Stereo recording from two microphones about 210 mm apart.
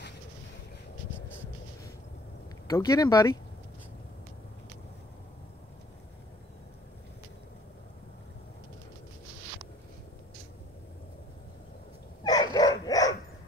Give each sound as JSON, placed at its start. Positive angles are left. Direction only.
{"t": 2.7, "sound": "speech", "side_deg": 15}
{"t": 12.2, "sound": "dog", "side_deg": 20}